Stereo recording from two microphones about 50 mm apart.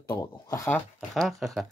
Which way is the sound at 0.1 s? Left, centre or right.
Left.